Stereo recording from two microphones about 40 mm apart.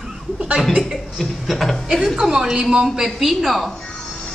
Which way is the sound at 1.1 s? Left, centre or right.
Centre.